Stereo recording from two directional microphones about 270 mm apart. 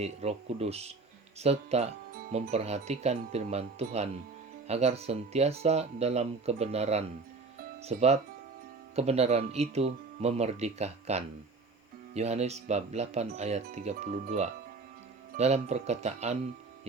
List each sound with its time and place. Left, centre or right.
0.0 s speech: right